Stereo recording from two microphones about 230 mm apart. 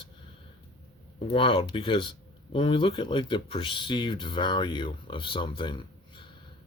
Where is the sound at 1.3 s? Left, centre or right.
Left.